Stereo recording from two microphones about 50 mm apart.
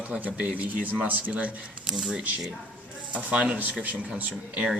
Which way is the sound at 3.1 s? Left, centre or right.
Right.